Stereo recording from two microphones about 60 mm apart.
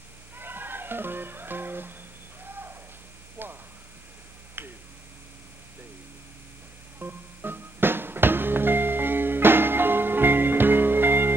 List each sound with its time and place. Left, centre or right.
0.4 s music: right
3.4 s a sound: right
4.6 s finger snapping: right
7.0 s music: right